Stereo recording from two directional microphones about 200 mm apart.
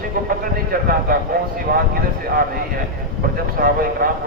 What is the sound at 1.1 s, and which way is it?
Speech, 45° right (ahead or behind).